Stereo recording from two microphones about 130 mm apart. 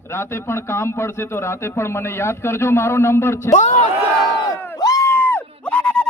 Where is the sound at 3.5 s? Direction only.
65° left (ahead or behind).